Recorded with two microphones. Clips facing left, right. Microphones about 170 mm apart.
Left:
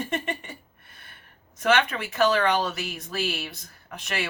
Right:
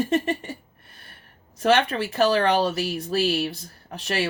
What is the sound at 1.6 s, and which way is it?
Speech, 35° right (ahead or behind).